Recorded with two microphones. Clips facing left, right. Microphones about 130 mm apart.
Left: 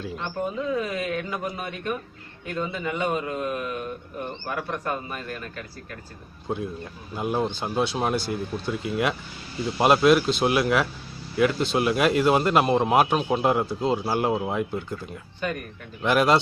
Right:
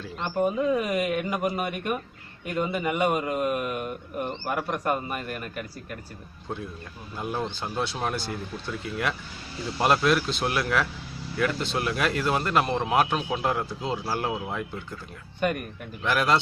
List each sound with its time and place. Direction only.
0.3 s a man's voice: 15° right (ahead or behind)
6.5 s speech: 15° left (ahead or behind)
16.0 s speech: 15° left (ahead or behind)